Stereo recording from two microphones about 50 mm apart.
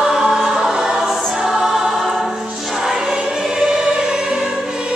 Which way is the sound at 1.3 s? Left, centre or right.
Centre.